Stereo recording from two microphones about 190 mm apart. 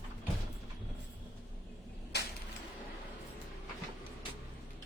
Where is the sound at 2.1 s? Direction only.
60° left (ahead or behind).